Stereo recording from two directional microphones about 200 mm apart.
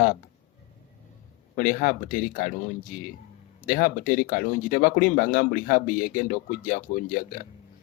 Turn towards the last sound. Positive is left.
turn(degrees=45)  # may be behind; listen again after turning